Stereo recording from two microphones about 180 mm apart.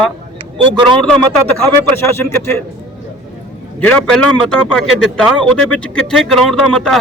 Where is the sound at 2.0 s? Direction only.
15° left (ahead or behind).